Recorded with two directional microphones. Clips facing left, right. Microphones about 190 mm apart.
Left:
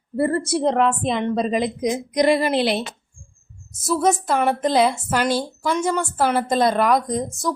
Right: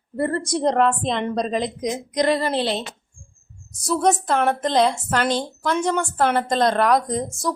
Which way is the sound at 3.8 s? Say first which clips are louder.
Even; 5° left (ahead or behind).